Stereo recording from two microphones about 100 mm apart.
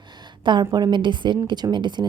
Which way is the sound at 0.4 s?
50° right (ahead or behind).